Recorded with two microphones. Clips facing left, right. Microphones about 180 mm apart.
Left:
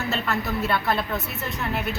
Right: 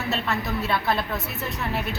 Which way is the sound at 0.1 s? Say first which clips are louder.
Right 1 dB; centre (ahead or behind).